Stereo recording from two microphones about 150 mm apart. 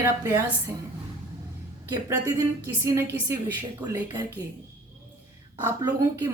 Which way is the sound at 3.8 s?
25° right (ahead or behind).